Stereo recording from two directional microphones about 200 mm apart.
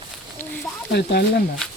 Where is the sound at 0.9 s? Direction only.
55° left (ahead or behind).